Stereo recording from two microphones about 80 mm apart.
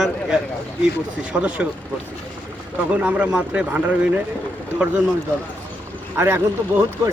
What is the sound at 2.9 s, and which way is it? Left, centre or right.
A man's voice, centre.